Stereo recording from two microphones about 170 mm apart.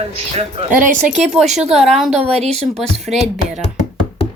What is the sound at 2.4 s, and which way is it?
Speech, 40° right (ahead or behind).